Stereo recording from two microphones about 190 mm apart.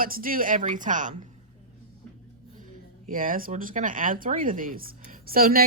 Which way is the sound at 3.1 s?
45° right (ahead or behind).